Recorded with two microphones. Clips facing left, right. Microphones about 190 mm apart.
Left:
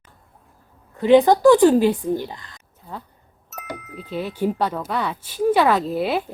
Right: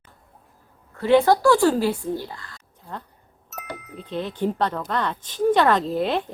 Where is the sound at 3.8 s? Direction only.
Centre (ahead or behind).